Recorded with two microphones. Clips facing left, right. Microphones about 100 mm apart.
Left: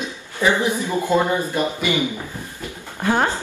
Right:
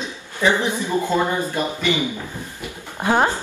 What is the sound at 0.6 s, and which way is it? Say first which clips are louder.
Speech: even; 15° left (ahead or behind).